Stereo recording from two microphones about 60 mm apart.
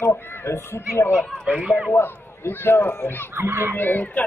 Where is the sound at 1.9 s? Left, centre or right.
Left.